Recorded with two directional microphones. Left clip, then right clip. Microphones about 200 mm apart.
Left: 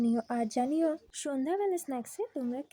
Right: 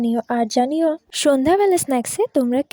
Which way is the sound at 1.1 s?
50° right (ahead or behind).